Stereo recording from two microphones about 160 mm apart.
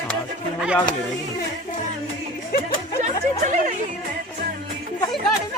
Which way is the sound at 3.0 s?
45° right (ahead or behind).